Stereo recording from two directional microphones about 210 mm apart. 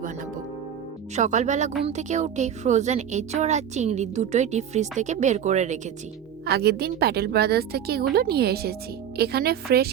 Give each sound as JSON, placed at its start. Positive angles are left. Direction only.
{"t": 1.1, "sound": "a woman's voice", "side_deg": -35}
{"t": 6.4, "sound": "a woman's voice", "side_deg": -50}